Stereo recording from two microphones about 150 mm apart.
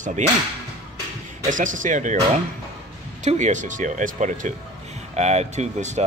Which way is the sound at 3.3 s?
50° right (ahead or behind).